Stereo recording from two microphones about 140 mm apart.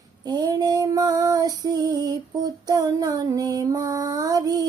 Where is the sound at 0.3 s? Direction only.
30° right (ahead or behind).